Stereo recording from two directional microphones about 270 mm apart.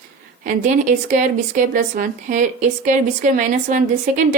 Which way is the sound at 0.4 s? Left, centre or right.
Right.